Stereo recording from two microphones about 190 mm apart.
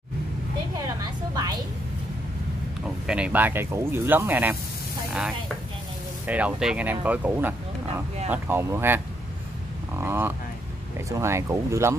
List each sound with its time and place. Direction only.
1.3 s vehicle: 20° right (ahead or behind)
2.8 s speech: 5° right (ahead or behind)
6.2 s speech: 5° right (ahead or behind)